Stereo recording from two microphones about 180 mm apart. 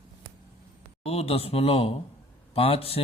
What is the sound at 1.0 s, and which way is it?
Speech, 35° left (ahead or behind).